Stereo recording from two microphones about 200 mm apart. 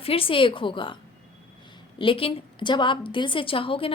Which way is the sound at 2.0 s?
25° left (ahead or behind).